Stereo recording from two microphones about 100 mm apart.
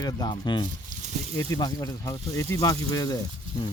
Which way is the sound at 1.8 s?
30° left (ahead or behind).